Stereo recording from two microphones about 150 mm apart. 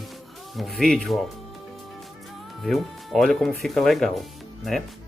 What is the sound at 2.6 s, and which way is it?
Speech, centre (ahead or behind).